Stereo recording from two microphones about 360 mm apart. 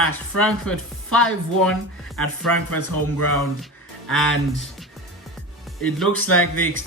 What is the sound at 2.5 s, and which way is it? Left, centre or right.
Speech, left.